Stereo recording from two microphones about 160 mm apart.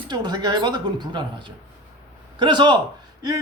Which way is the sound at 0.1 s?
25° right (ahead or behind).